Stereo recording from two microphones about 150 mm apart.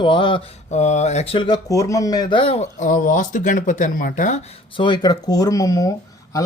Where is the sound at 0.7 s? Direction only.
50° left (ahead or behind).